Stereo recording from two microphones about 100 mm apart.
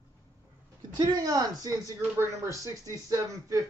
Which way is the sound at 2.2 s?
30° right (ahead or behind).